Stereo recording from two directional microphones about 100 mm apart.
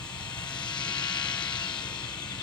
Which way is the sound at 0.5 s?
50° left (ahead or behind).